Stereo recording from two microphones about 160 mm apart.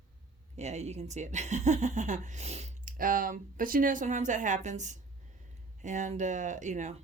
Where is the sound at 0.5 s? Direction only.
45° right (ahead or behind).